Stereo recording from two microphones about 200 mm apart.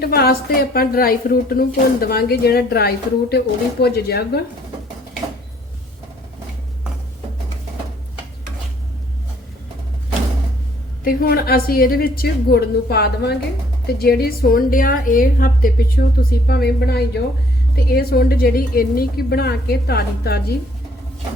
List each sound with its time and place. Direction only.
0.0 s speech: 50° left (ahead or behind)
11.0 s speech: 45° left (ahead or behind)